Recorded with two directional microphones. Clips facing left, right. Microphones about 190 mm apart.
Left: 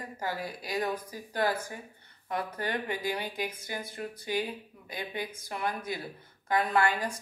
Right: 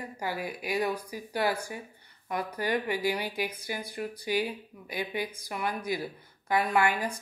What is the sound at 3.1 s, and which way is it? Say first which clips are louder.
Speech: right 2 dB; 15° right (ahead or behind).